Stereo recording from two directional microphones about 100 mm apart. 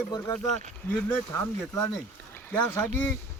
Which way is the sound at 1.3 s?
25° left (ahead or behind).